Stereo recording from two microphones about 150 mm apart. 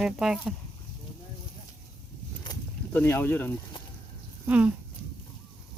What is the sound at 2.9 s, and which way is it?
Speech, 15° left (ahead or behind).